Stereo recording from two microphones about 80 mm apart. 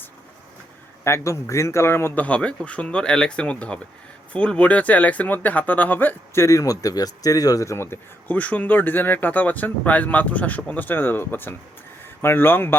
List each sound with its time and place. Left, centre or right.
1.0 s a man's voice: left
2.2 s a man's voice: centre
6.3 s a man's voice: left